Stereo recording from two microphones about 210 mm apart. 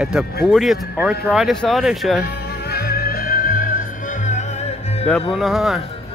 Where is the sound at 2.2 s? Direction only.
50° left (ahead or behind); by 5.0 s 30° left (ahead or behind).